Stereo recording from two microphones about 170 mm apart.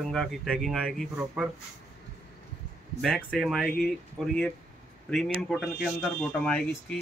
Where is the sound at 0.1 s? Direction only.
Centre (ahead or behind).